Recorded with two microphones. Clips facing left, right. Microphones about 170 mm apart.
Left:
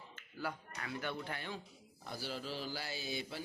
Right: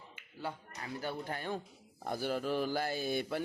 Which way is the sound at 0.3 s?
30° right (ahead or behind).